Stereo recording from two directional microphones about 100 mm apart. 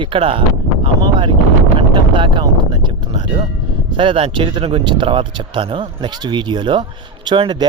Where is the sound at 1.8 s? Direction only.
55° right (ahead or behind).